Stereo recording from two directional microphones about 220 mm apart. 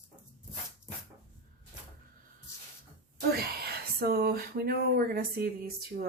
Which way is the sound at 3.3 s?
45° right (ahead or behind).